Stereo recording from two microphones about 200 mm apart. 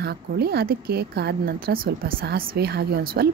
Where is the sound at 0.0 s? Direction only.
55° right (ahead or behind).